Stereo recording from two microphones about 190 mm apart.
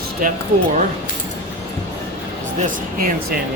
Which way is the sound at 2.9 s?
50° right (ahead or behind).